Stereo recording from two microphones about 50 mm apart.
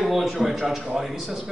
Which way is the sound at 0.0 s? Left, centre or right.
Centre.